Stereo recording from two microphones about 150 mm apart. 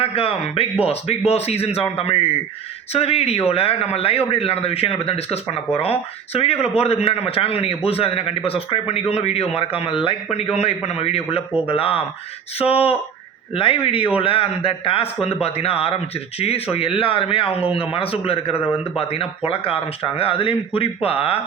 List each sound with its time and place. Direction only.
0.0 s a man's voice: 40° left (ahead or behind)